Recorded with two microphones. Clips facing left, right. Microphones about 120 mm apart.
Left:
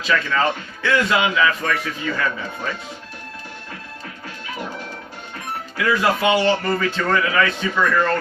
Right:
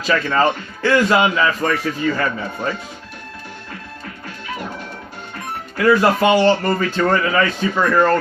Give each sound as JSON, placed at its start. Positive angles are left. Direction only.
{"t": 0.0, "sound": "a man's voice", "side_deg": -40}
{"t": 5.7, "sound": "a man's voice", "side_deg": -40}